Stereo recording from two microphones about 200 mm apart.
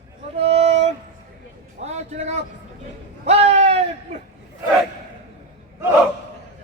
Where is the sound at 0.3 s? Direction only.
30° right (ahead or behind).